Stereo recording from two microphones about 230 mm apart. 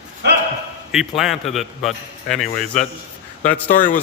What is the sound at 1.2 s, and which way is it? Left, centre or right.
A man's voice, centre.